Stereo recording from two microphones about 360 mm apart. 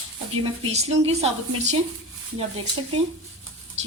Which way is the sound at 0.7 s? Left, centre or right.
Centre.